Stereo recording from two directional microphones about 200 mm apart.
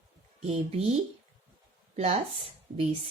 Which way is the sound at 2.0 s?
30° right (ahead or behind).